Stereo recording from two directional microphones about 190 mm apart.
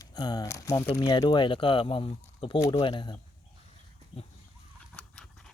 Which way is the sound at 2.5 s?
15° left (ahead or behind).